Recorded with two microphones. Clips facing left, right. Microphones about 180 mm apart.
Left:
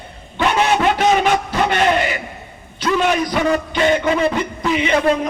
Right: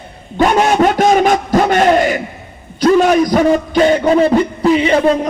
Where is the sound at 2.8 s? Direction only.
40° right (ahead or behind).